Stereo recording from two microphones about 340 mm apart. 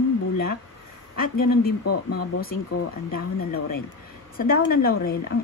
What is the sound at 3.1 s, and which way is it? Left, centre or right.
Speech, left.